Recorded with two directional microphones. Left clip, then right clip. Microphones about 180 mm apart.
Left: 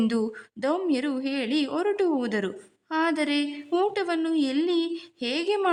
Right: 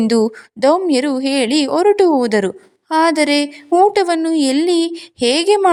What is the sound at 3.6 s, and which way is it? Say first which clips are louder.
Speech: right 14 dB; 20° right (ahead or behind).